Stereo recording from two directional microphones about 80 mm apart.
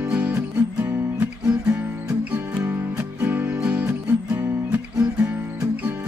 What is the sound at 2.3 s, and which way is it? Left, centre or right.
Music, centre.